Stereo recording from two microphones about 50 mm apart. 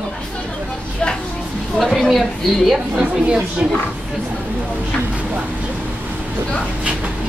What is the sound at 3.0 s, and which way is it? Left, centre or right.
Speech, centre.